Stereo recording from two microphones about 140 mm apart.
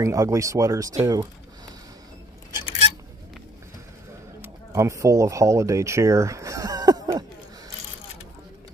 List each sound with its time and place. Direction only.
0.0 s speech: 20° right (ahead or behind)
4.4 s speech: 20° right (ahead or behind)